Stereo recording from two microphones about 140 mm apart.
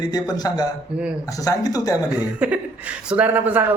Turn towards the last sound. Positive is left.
turn(degrees=-15)  # may be behind; listen again after turning